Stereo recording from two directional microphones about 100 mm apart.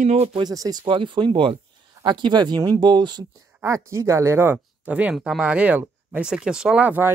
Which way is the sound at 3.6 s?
30° right (ahead or behind).